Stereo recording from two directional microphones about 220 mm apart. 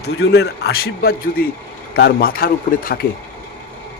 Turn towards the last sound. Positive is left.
turn(degrees=40)  # may be behind; listen again after turning